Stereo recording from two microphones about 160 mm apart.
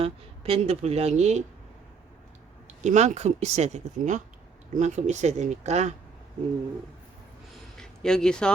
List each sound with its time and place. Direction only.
0.0 s speech: 35° right (ahead or behind)
2.8 s speech: 50° right (ahead or behind)
7.8 s speech: 5° left (ahead or behind)